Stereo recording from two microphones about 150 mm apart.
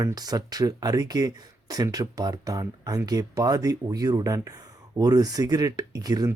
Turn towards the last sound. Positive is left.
turn(degrees=-25)  # may be behind; listen again after turning